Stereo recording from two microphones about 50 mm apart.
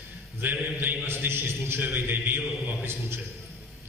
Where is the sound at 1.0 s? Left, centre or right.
Right.